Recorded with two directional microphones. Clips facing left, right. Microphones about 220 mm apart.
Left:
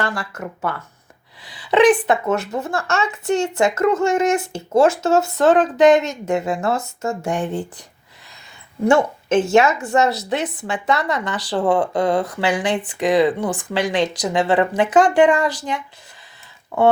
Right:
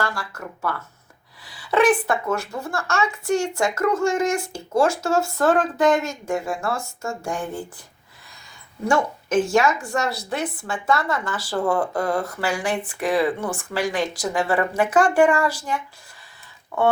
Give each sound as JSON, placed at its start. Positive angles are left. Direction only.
{"t": 0.0, "sound": "speech", "side_deg": 20}
{"t": 8.9, "sound": "speech", "side_deg": 25}